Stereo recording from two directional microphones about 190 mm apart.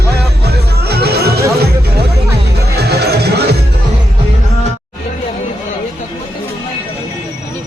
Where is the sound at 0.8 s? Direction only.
55° right (ahead or behind).